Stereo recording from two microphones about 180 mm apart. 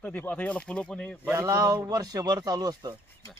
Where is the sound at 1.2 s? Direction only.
15° right (ahead or behind).